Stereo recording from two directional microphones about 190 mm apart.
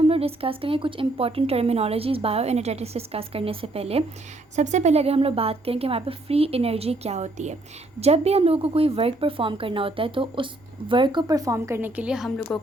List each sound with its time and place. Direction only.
0.0 s a woman's voice: 30° right (ahead or behind); by 12.3 s 5° right (ahead or behind)
12.5 s speech: 5° left (ahead or behind)